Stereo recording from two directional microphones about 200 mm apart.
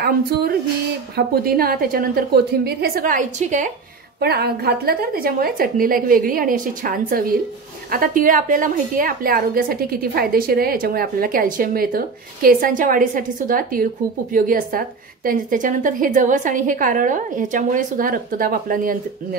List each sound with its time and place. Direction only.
0.0 s a woman's voice: 50° right (ahead or behind)
4.2 s a woman's voice: 55° right (ahead or behind)